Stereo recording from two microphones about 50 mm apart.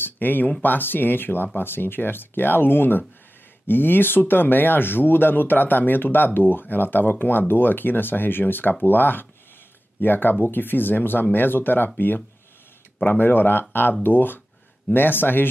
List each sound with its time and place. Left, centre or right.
0.0 s a sound: left
0.6 s speech: left
13.0 s speech: left